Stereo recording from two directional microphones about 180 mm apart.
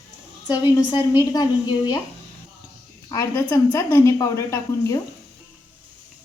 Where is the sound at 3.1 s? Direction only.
15° left (ahead or behind).